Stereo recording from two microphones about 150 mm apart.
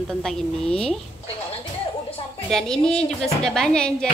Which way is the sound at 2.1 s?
40° left (ahead or behind).